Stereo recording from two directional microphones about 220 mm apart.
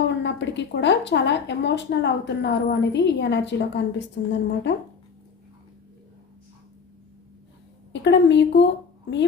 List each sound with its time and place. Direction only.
0.2 s speech: 55° left (ahead or behind)
8.0 s speech: 55° left (ahead or behind)